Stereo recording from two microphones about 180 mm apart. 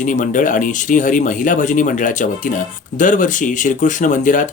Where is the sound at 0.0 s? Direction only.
45° left (ahead or behind).